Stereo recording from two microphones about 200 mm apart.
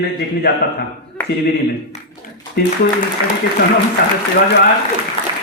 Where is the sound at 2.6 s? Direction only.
50° left (ahead or behind).